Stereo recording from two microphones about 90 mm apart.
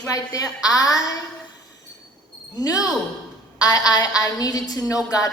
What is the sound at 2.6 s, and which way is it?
A woman's voice, 40° left (ahead or behind).